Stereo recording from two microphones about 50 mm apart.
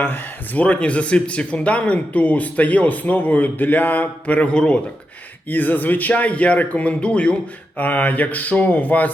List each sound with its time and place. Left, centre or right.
0.0 s speech: left
5.5 s speech: left